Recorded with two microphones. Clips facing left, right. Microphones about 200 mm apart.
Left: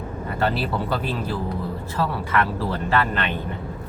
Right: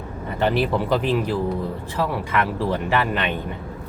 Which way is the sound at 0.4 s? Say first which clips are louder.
Right 4 dB; 15° right (ahead or behind).